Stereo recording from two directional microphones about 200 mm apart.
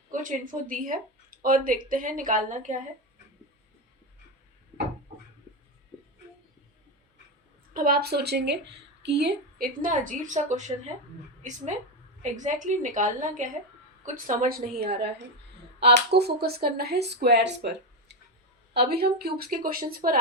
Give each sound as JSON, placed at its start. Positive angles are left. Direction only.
{"t": 0.1, "sound": "a woman's voice", "side_deg": -40}
{"t": 7.7, "sound": "a woman's voice", "side_deg": -45}
{"t": 12.2, "sound": "a woman's voice", "side_deg": -40}
{"t": 15.8, "sound": "a woman's voice", "side_deg": -55}